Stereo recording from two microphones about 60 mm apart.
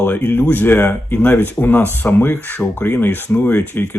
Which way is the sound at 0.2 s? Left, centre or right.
Left.